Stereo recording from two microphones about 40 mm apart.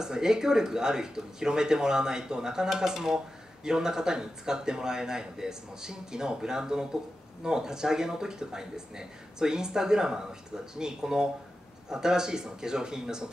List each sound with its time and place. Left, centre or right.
0.0 s speech: centre